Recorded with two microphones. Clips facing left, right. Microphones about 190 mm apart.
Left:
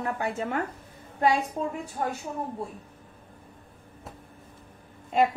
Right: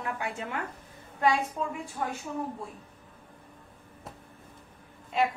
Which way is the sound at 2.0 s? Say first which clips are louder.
Left 3 dB; 40° left (ahead or behind).